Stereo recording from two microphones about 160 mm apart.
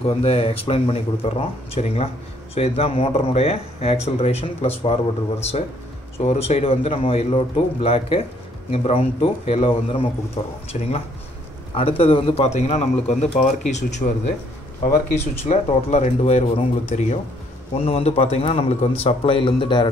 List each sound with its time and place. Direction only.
0.0 s speech: 40° left (ahead or behind)
14.8 s speech: 65° left (ahead or behind)
15.4 s speech: 45° left (ahead or behind); by 19.9 s 30° left (ahead or behind)